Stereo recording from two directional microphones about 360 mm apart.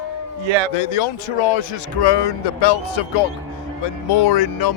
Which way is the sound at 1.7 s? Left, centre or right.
Left.